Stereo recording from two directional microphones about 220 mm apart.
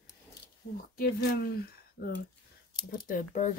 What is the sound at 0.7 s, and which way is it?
Speech, 45° left (ahead or behind).